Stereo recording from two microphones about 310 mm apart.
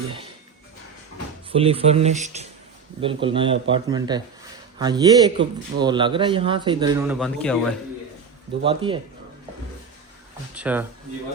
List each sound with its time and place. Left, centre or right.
1.5 s speech: centre
7.2 s a man's voice: centre
8.6 s speech: centre
10.5 s speech: centre